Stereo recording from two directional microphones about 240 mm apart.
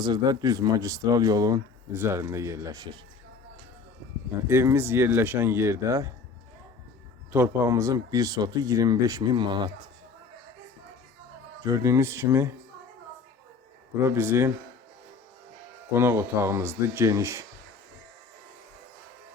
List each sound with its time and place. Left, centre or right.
0.0 s speech: centre
4.4 s speech: centre
7.3 s speech: centre
11.6 s speech: centre
14.0 s speech: centre
15.9 s speech: centre